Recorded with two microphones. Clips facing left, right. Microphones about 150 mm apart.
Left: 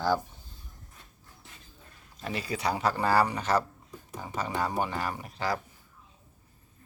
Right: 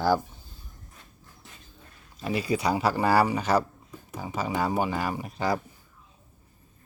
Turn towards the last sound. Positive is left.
turn(degrees=-15)  # may be behind; listen again after turning